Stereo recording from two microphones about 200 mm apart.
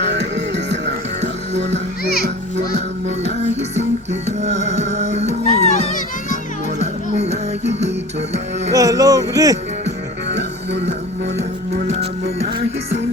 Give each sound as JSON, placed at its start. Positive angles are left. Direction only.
{"t": 0.0, "sound": "music", "side_deg": -60}
{"t": 2.2, "sound": "children playing", "side_deg": -60}
{"t": 4.4, "sound": "music", "side_deg": -35}
{"t": 5.5, "sound": "children playing", "side_deg": 35}
{"t": 7.2, "sound": "music", "side_deg": -35}
{"t": 8.7, "sound": "a sound", "side_deg": -15}
{"t": 10.2, "sound": "music", "side_deg": -60}